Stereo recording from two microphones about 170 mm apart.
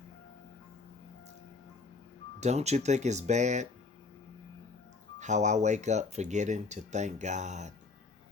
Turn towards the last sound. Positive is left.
turn(degrees=-45)  # may be behind; listen again after turning